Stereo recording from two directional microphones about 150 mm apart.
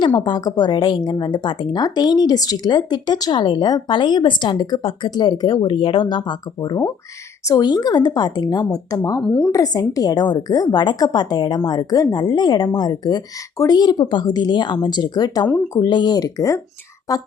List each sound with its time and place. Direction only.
0.0 s a woman's voice: 30° left (ahead or behind)
9.2 s a woman's voice: 5° left (ahead or behind)
9.5 s a woman's voice: 25° left (ahead or behind)